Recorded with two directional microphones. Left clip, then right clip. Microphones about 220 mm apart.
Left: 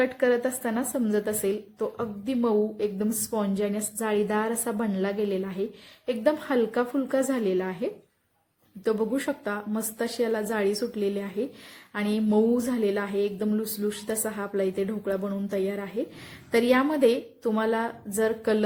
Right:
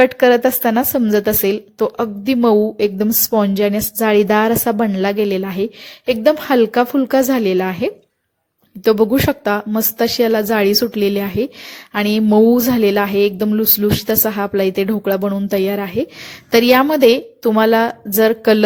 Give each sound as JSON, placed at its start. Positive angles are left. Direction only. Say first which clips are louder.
{"t": 0.0, "sound": "a woman's voice", "louder": "right 13 dB", "side_deg": -40}